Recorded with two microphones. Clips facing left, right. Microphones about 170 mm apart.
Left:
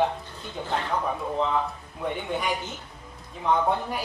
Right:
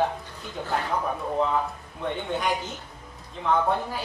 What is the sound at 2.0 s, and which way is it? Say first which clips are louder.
A man's voice: right 1 dB; 10° left (ahead or behind).